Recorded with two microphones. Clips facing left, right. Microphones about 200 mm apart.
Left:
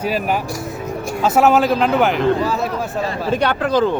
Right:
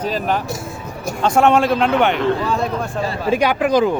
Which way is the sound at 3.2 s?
10° right (ahead or behind).